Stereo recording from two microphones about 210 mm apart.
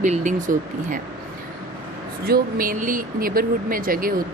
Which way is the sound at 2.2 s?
45° right (ahead or behind).